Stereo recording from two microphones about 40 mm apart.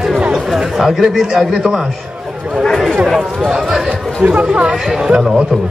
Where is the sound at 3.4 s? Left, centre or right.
Centre.